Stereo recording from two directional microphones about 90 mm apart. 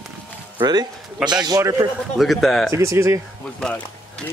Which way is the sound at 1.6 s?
40° right (ahead or behind).